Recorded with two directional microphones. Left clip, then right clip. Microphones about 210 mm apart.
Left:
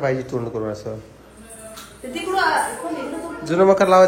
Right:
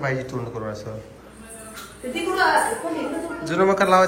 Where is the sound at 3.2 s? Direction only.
25° left (ahead or behind).